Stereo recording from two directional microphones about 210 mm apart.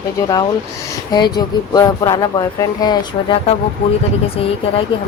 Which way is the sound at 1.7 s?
15° left (ahead or behind).